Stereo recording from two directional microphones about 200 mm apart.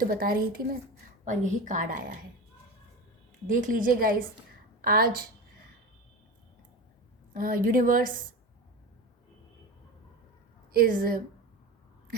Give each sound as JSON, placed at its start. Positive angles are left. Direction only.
{"t": 0.0, "sound": "a woman's voice", "side_deg": -45}
{"t": 3.4, "sound": "a woman's voice", "side_deg": -40}
{"t": 7.3, "sound": "a woman's voice", "side_deg": -45}
{"t": 10.8, "sound": "a woman's voice", "side_deg": -45}